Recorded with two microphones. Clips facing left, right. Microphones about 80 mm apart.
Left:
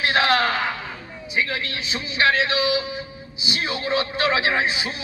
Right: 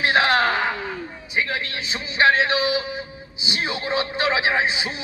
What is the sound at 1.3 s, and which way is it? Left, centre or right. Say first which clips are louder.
A man's voice: even; right.